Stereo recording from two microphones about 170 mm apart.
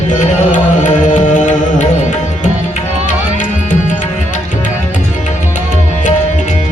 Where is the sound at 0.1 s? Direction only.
45° left (ahead or behind).